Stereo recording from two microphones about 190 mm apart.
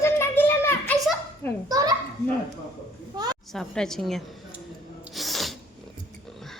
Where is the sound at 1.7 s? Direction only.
20° right (ahead or behind).